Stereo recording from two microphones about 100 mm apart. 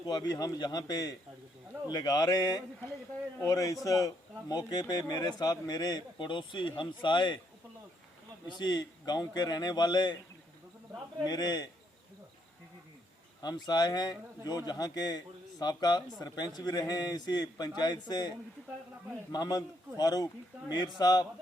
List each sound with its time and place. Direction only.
0.0 s a man's voice: 40° left (ahead or behind)
8.5 s speech: 45° left (ahead or behind)
11.3 s a man's voice: 40° left (ahead or behind)
13.4 s a man's voice: 45° left (ahead or behind)